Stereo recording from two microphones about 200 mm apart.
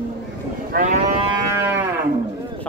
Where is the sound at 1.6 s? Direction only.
10° right (ahead or behind).